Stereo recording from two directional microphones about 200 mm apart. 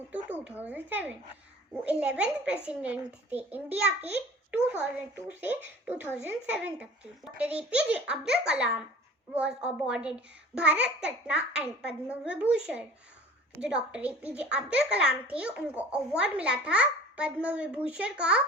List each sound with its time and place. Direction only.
0.4 s a child's voice: 10° right (ahead or behind)